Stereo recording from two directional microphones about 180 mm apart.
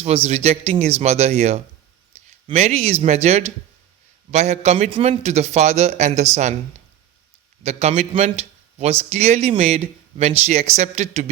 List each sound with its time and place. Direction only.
0.0 s speech: 35° right (ahead or behind)
2.1 s a sound: 35° right (ahead or behind)
2.5 s speech: 35° right (ahead or behind)
7.6 s speech: 35° right (ahead or behind)